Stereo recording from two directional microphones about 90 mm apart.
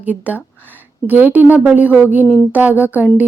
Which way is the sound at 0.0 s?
20° right (ahead or behind).